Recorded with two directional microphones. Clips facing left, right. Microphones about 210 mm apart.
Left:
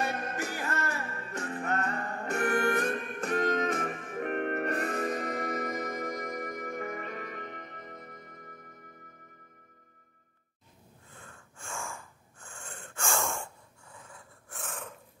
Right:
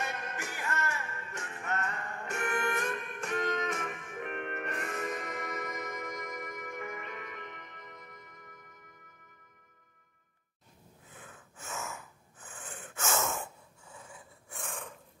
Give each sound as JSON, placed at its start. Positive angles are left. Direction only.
{"t": 0.0, "sound": "music", "side_deg": 35}
{"t": 11.1, "sound": "wheeze", "side_deg": -5}